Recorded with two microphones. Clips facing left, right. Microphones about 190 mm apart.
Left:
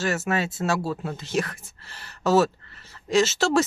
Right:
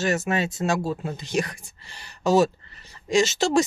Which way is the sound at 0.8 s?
15° right (ahead or behind).